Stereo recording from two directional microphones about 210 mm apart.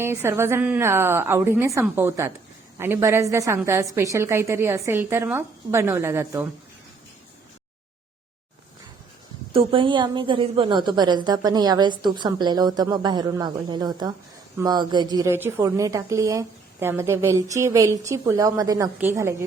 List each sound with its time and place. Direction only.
0.0 s a woman's voice: 10° right (ahead or behind)
9.5 s a woman's voice: 25° right (ahead or behind)